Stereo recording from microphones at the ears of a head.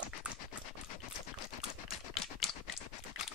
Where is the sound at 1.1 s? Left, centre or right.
Left.